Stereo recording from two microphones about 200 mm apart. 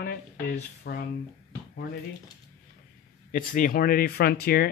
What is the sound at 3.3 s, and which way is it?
Speech, 40° left (ahead or behind).